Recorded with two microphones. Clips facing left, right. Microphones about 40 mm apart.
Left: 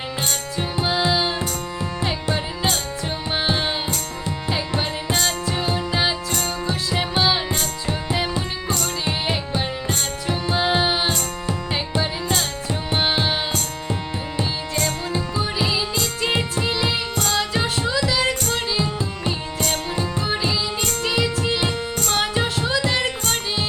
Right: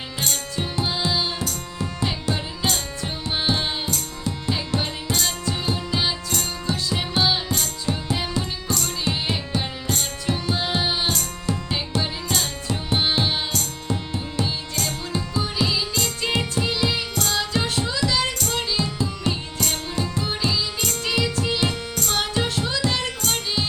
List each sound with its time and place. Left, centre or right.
0.8 s tabla: centre
1.3 s music: left
2.0 s music: centre
17.5 s music: centre